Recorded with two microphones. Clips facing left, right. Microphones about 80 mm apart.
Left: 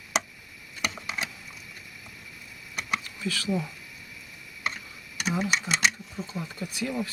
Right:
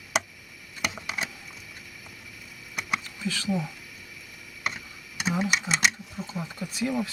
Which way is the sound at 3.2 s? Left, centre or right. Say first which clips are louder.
Even; right.